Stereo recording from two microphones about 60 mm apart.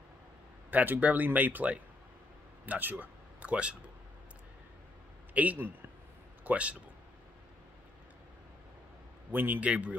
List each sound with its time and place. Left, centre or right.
0.7 s speech: right
5.3 s a man's voice: right
9.3 s a man's voice: right